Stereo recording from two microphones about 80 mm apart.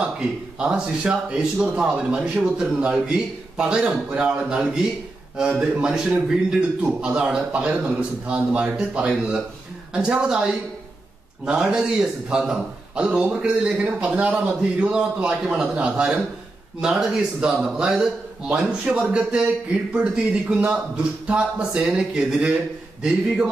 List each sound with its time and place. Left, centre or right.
0.6 s a man's voice: centre